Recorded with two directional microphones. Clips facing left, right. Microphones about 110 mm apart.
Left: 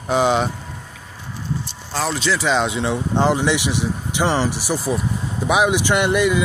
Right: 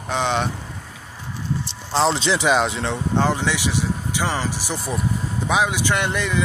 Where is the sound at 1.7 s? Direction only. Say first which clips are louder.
Right 6 dB; 25° right (ahead or behind).